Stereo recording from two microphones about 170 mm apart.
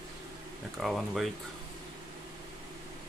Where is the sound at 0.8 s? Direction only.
Centre (ahead or behind).